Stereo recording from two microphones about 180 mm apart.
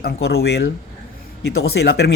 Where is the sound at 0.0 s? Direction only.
65° left (ahead or behind).